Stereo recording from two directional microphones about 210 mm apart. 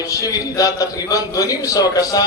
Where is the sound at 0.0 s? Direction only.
15° left (ahead or behind).